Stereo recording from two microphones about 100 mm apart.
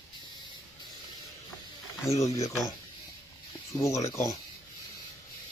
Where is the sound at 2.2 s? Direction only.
30° left (ahead or behind).